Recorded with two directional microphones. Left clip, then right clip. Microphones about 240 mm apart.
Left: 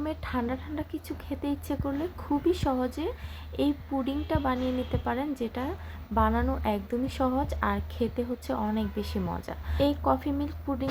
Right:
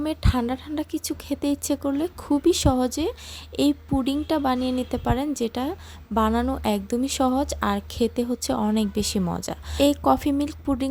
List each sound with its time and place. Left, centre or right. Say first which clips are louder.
0.0 s speech: right 5 dB; right